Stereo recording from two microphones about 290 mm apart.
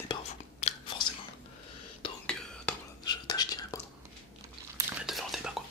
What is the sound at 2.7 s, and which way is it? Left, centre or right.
Whispering, centre.